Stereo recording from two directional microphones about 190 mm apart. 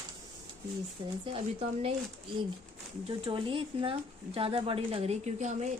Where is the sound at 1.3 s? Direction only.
30° right (ahead or behind).